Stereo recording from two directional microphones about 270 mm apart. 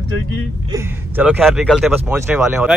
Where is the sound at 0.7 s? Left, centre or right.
Centre.